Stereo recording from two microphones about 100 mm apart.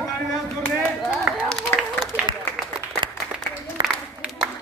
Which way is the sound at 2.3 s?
50° right (ahead or behind).